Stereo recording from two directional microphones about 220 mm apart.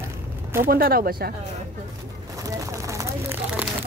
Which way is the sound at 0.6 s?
40° right (ahead or behind).